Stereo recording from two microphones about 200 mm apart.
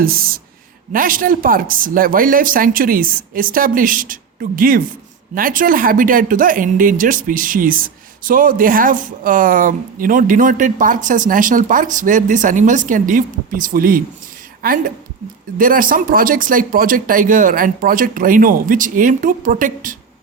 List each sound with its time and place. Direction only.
0.9 s speech: 45° right (ahead or behind)